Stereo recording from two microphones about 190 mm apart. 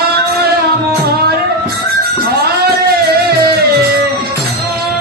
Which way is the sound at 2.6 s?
55° right (ahead or behind).